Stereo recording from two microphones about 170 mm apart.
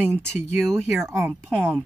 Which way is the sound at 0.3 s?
5° left (ahead or behind).